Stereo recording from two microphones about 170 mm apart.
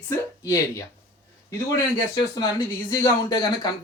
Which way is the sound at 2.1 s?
20° left (ahead or behind).